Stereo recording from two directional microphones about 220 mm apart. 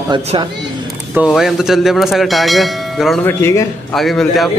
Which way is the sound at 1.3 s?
Centre (ahead or behind).